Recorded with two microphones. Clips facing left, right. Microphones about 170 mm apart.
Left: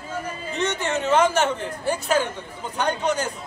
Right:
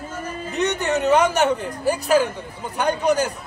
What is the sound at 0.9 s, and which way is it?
Speech, 15° right (ahead or behind).